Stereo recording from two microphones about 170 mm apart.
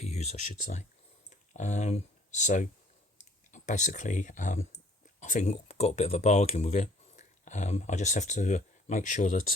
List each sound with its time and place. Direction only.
0.0 s speech: 40° left (ahead or behind)